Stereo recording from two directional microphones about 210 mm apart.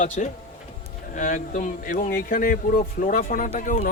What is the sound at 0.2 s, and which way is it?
A man's voice, 35° left (ahead or behind).